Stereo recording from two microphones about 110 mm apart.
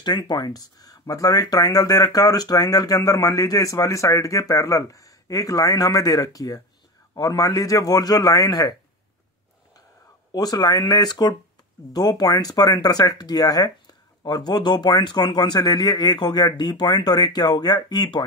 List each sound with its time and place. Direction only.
0.0 s speech: 40° left (ahead or behind)
10.3 s speech: 35° left (ahead or behind)